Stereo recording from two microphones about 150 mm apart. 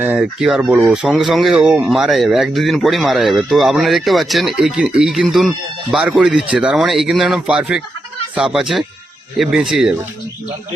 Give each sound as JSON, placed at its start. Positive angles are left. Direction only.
{"t": 0.0, "sound": "speech", "side_deg": -5}